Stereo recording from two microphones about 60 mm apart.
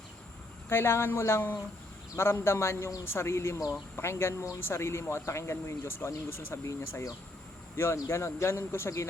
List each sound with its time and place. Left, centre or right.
0.7 s speech: left
8.0 s speech: left